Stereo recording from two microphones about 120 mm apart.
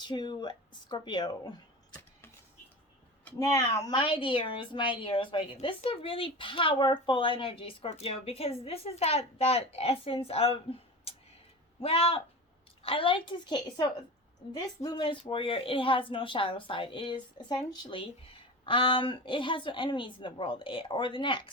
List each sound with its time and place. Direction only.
0.0 s speech: 40° left (ahead or behind)
3.3 s a woman's voice: 30° left (ahead or behind)